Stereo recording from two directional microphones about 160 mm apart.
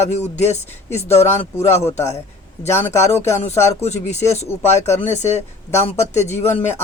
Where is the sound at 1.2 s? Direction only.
15° left (ahead or behind).